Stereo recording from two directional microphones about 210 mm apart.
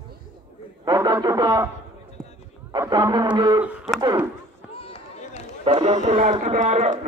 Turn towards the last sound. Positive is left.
turn(degrees=-35)  # may be behind; listen again after turning